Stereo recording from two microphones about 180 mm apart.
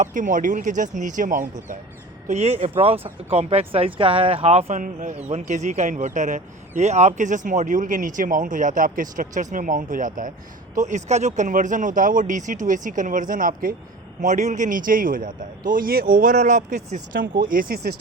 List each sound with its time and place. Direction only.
0.0 s speech: 45° right (ahead or behind)